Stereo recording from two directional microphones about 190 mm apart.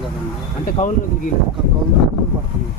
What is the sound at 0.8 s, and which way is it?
Speech, 40° left (ahead or behind).